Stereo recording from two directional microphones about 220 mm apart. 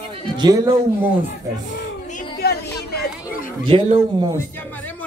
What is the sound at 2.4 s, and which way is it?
Chatter, 45° left (ahead or behind).